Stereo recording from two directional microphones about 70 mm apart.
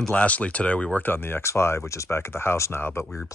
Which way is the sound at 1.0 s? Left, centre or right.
Left.